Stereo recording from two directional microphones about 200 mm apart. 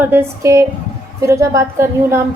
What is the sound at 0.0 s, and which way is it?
A woman's voice, 10° right (ahead or behind).